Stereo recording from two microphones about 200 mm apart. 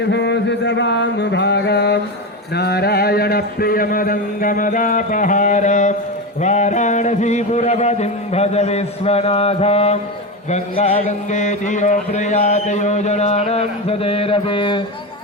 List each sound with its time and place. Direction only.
0.0 s mantra: 60° left (ahead or behind)
2.6 s a man's voice: 55° left (ahead or behind); by 14.8 s 25° left (ahead or behind)